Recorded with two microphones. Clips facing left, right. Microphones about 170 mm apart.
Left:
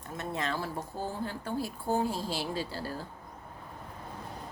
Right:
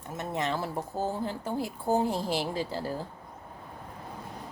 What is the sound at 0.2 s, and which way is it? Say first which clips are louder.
Speech: right 3 dB; 20° right (ahead or behind).